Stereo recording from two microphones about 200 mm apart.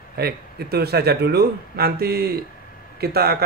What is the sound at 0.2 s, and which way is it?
Speech, 50° right (ahead or behind).